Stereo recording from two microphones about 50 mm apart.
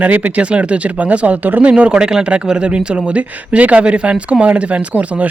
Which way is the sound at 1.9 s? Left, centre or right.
Centre.